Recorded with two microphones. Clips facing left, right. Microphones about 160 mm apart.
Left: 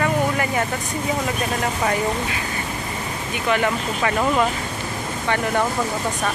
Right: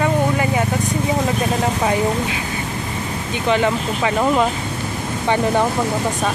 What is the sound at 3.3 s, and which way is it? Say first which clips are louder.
Speech: right 3 dB; 20° right (ahead or behind).